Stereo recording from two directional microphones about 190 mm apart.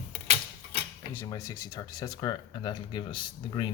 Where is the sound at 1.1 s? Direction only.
15° left (ahead or behind).